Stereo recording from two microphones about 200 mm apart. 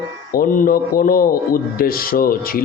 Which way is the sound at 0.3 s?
45° left (ahead or behind).